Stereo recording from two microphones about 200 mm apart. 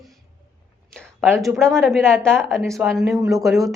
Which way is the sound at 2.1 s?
5° left (ahead or behind).